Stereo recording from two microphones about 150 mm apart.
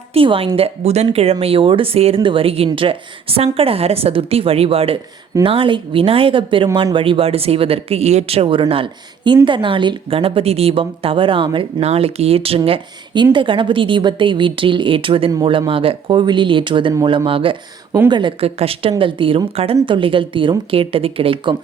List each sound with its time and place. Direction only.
0.1 s speech: 40° right (ahead or behind)